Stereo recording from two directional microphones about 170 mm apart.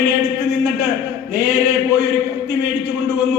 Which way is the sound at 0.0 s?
15° right (ahead or behind).